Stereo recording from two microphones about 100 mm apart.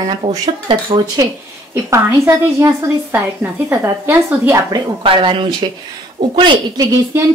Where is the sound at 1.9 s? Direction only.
25° right (ahead or behind).